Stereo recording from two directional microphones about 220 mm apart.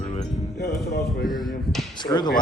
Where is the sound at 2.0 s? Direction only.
20° left (ahead or behind).